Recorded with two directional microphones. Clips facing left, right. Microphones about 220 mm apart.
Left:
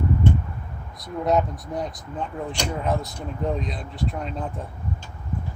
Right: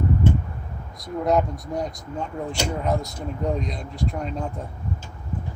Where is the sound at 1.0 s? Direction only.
Centre (ahead or behind).